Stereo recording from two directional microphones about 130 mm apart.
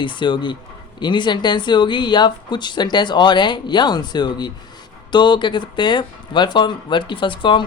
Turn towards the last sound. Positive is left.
turn(degrees=40)  # may be behind; listen again after turning